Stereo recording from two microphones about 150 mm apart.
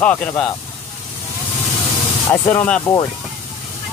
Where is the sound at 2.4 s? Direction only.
10° left (ahead or behind).